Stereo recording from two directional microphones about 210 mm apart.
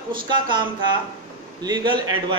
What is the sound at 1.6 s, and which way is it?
Speech, 20° right (ahead or behind).